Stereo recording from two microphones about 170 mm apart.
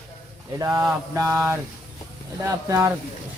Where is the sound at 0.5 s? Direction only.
20° right (ahead or behind).